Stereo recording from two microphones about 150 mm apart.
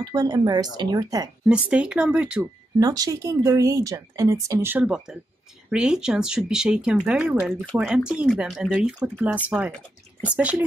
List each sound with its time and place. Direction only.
0.0 s speech: 25° right (ahead or behind)
1.5 s speech: 5° right (ahead or behind)
2.8 s speech: 25° right (ahead or behind)